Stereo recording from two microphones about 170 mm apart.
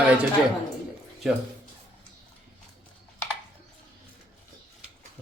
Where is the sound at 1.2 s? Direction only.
Centre (ahead or behind).